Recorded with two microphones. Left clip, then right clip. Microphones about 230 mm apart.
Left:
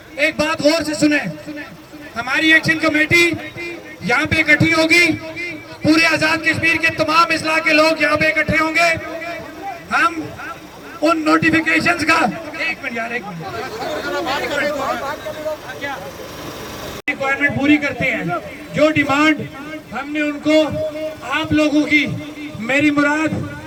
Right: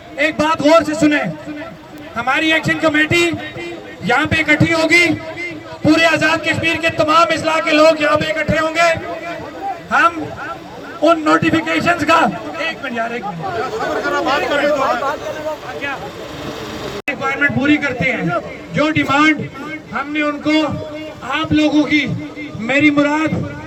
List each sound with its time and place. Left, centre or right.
0.2 s a man's voice: centre
11.0 s a man's voice: centre
13.7 s speech: centre
17.1 s a man's voice: centre